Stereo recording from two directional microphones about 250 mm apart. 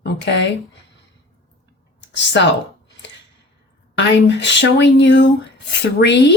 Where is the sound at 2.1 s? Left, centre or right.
Left.